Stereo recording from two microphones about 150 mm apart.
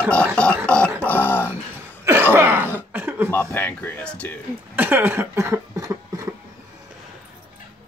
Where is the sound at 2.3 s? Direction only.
15° right (ahead or behind).